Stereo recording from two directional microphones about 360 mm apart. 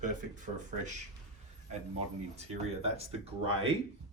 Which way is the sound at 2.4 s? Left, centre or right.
Centre.